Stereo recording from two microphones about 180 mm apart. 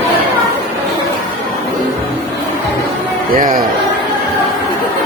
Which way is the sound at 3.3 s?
50° right (ahead or behind).